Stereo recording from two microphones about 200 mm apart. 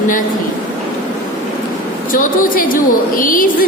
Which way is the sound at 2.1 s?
45° left (ahead or behind).